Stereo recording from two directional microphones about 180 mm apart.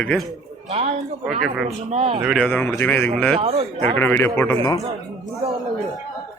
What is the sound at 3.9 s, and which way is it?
Speech, 10° left (ahead or behind).